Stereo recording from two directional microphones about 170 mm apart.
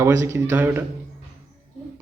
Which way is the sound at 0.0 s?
15° right (ahead or behind).